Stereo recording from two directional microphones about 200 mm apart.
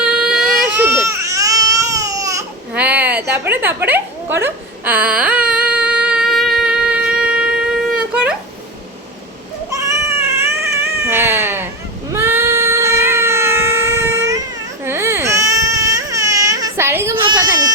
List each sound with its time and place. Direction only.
0.0 s baby cry: 5° right (ahead or behind)
7.9 s a sound: 5° right (ahead or behind)
9.6 s cat: 15° right (ahead or behind)
14.8 s baby cry: 15° right (ahead or behind)